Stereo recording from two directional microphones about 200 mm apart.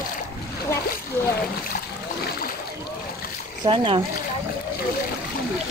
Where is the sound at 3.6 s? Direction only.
25° right (ahead or behind).